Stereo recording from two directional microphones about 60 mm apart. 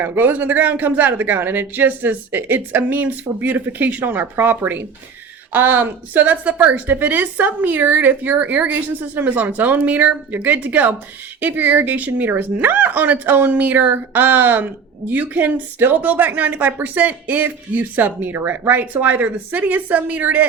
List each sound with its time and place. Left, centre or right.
0.0 s a woman's voice: right